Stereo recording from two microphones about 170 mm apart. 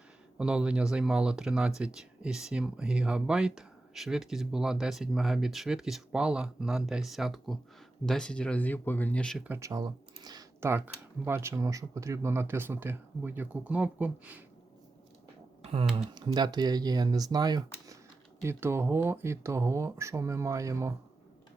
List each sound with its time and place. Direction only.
0.3 s speech: 5° right (ahead or behind)
9.4 s speech: 15° right (ahead or behind)
15.6 s speech: 35° right (ahead or behind)
16.1 s speech: 25° right (ahead or behind)